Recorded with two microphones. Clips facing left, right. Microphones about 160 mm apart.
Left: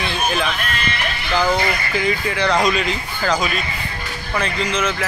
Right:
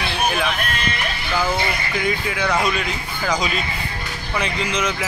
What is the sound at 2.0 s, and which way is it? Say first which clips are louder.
Speech: left 2 dB; 5° right (ahead or behind).